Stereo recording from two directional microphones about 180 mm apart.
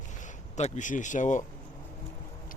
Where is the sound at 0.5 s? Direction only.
40° left (ahead or behind).